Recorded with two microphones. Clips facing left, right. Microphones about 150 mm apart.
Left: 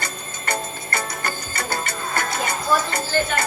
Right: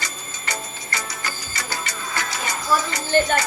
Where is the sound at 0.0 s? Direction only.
55° left (ahead or behind).